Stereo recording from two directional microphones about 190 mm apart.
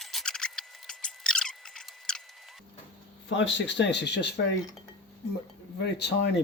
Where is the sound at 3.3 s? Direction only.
70° left (ahead or behind).